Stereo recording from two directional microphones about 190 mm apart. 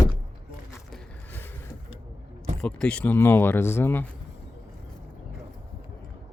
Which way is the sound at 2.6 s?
5° left (ahead or behind).